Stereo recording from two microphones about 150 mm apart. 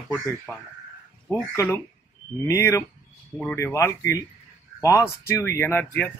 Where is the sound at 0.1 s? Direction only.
15° left (ahead or behind).